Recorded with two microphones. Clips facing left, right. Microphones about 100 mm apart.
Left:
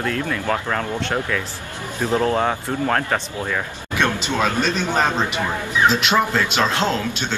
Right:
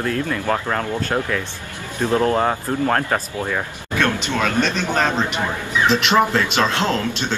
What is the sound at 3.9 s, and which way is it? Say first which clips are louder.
Speech: even; 15° left (ahead or behind).